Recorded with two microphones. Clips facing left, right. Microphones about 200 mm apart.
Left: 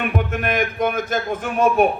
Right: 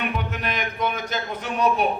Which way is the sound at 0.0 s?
50° left (ahead or behind).